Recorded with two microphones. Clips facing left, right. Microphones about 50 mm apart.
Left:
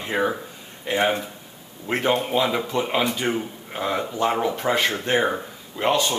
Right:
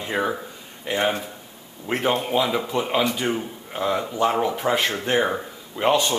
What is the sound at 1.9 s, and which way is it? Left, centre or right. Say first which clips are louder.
Speech: left 1 dB; centre.